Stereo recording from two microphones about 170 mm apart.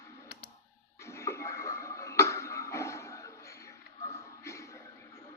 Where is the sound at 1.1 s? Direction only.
15° left (ahead or behind).